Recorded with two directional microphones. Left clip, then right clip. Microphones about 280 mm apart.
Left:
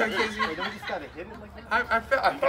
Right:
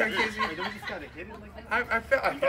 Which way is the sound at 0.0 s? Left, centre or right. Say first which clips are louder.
Left 1 dB; centre.